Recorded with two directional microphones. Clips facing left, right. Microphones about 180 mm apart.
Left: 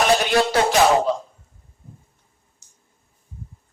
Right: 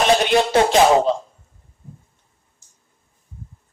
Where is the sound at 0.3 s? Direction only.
25° right (ahead or behind).